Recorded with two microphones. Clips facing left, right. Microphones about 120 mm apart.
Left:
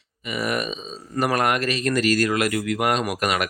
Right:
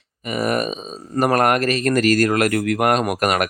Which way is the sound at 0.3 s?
45° right (ahead or behind).